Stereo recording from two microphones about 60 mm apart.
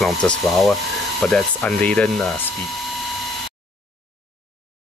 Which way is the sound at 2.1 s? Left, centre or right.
Centre.